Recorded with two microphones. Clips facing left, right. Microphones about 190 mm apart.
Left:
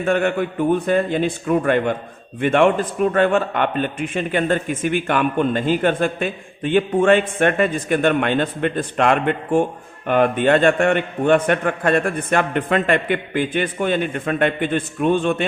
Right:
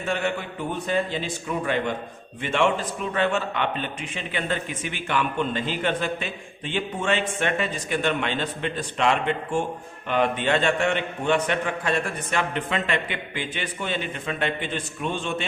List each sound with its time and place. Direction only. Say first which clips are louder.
0.0 s a man's voice: left 8 dB; 55° left (ahead or behind)